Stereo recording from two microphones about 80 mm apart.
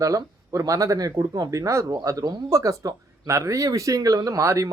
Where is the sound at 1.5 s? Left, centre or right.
Right.